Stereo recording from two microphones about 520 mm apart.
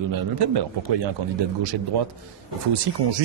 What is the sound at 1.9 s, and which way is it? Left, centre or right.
Speech, right.